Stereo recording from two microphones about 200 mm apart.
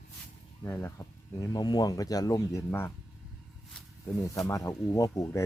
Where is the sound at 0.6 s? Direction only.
10° left (ahead or behind).